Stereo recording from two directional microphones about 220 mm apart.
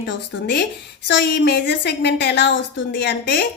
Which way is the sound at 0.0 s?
50° left (ahead or behind).